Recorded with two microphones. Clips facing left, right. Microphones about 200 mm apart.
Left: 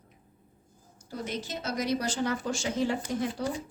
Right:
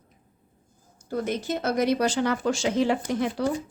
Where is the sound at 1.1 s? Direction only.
55° right (ahead or behind); by 3.4 s 80° right.